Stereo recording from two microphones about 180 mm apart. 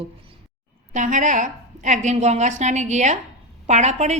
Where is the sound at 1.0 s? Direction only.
45° right (ahead or behind).